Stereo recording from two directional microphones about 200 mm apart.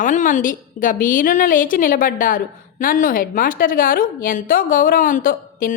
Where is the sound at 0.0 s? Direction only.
40° left (ahead or behind).